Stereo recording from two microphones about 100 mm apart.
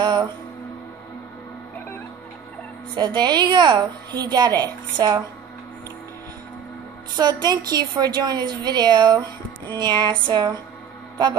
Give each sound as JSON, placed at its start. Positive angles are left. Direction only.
{"t": 0.0, "sound": "music", "side_deg": -45}
{"t": 3.0, "sound": "a woman's voice", "side_deg": -45}
{"t": 7.2, "sound": "a woman's voice", "side_deg": -45}